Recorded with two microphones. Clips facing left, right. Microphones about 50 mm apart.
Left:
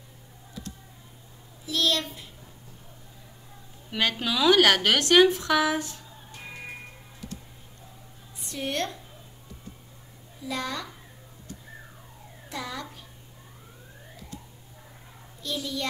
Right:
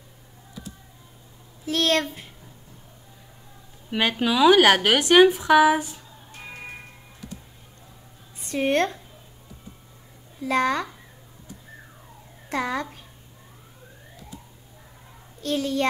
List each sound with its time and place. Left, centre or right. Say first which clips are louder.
1.7 s a child's voice: right 4 dB; right
3.9 s a woman's voice: right 4 dB; centre
8.5 s a woman's voice: right 8 dB; right
10.4 s a child's voice: right 10 dB; right
12.4 s a child's voice: right 9 dB; right
15.4 s a child's voice: right 8 dB; right